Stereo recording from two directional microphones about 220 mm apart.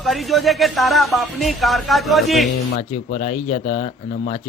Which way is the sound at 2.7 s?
30° left (ahead or behind).